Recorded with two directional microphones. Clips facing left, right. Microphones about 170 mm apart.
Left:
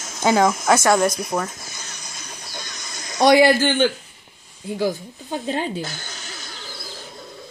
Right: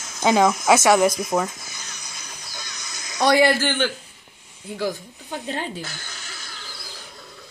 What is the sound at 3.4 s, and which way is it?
Speech, 25° left (ahead or behind).